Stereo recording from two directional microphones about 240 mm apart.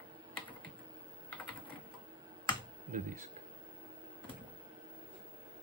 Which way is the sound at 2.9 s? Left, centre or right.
Right.